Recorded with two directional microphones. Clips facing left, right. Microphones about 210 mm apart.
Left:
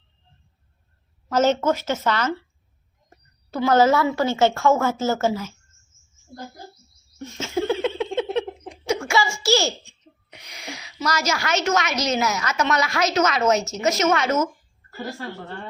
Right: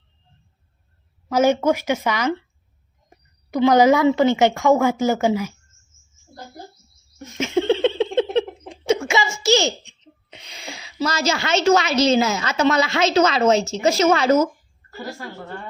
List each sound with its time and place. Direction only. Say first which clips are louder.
1.3 s a woman's voice: right 2 dB; 10° right (ahead or behind)
7.5 s giggle: right 4 dB; 25° right (ahead or behind)